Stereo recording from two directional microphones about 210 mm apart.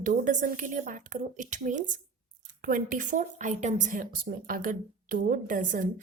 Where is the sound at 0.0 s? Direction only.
35° right (ahead or behind).